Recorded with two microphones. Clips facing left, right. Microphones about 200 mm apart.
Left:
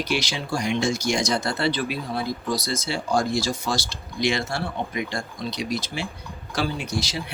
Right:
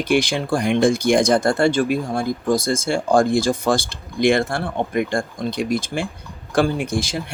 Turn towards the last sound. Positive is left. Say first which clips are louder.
# right 6 dB
turn(degrees=-50)  # may be behind; listen again after turning